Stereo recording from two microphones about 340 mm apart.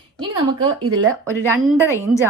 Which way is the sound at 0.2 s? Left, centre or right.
Centre.